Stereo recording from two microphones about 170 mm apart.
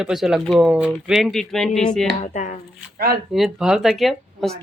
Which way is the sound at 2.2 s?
45° left (ahead or behind).